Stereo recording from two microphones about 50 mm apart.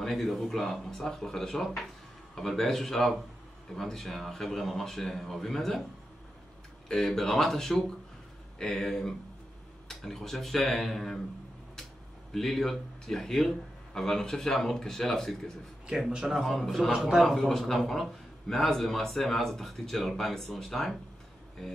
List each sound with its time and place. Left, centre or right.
0.0 s a man's voice: centre
6.9 s a man's voice: centre
12.3 s a man's voice: centre
16.1 s a man's voice: centre
16.3 s speech: centre
17.3 s a man's voice: centre